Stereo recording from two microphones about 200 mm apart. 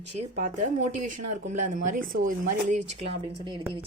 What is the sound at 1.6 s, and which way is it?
Speech, 40° right (ahead or behind).